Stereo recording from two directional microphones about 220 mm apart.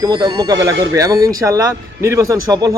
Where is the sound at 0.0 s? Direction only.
20° right (ahead or behind).